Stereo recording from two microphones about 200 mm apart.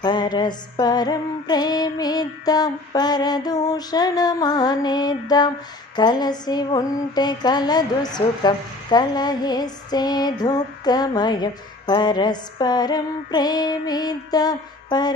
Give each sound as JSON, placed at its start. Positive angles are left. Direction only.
{"t": 0.0, "sound": "mantra", "side_deg": 20}